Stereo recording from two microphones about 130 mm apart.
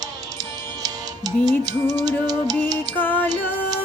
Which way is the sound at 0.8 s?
30° right (ahead or behind).